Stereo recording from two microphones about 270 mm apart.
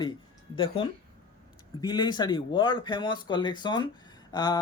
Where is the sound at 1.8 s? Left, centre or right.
Centre.